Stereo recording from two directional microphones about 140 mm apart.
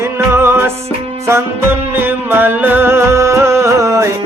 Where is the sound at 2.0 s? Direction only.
15° right (ahead or behind).